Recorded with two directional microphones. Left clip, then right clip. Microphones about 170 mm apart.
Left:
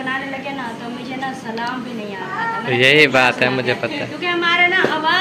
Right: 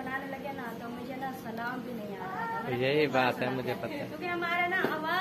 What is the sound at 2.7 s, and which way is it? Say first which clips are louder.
A man's voice: left 16 dB; 5° left (ahead or behind).